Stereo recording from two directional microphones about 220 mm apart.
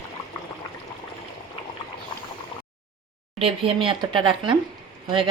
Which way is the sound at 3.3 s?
25° right (ahead or behind).